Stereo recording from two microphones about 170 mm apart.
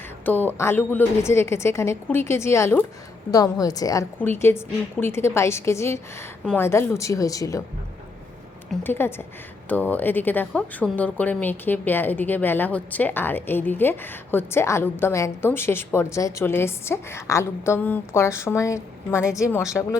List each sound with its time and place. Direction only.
0.3 s speech: 10° left (ahead or behind)
8.8 s speech: 15° left (ahead or behind)